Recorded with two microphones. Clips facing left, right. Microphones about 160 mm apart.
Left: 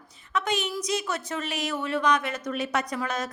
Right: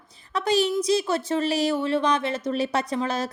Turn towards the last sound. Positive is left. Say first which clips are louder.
# right 4 dB
turn(degrees=-30)  # may be behind; listen again after turning